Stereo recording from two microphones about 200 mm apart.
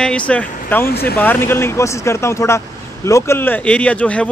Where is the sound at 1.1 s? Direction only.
10° left (ahead or behind).